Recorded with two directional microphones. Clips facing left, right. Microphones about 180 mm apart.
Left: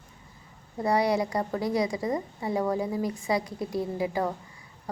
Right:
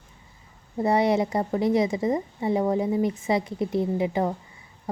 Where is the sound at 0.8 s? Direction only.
25° right (ahead or behind).